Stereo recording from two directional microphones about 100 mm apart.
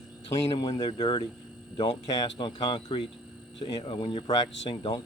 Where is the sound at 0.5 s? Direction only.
45° left (ahead or behind).